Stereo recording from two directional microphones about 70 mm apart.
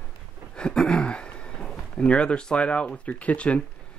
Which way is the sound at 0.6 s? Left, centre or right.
Centre.